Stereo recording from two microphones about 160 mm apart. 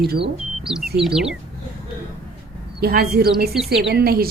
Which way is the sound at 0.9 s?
5° right (ahead or behind).